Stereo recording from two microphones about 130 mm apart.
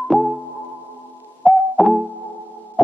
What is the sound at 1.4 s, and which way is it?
Music, centre (ahead or behind).